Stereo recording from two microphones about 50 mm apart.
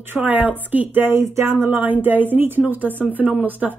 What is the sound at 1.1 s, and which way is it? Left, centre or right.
Speech, right.